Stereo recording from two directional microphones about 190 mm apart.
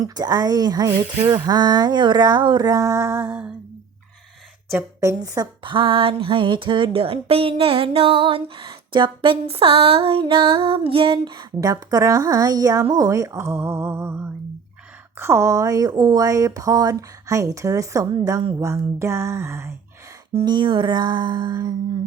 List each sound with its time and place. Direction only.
0.0 s speech: 20° right (ahead or behind)
4.7 s speech: 15° right (ahead or behind)